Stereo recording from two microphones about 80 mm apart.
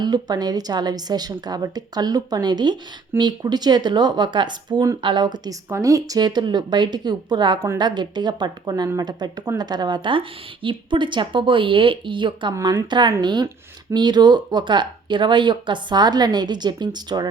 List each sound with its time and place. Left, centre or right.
0.0 s speech: right
5.6 s a woman's voice: right
6.1 s a woman's voice: right